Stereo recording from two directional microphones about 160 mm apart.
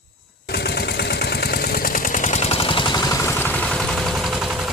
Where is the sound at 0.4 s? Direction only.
90° left.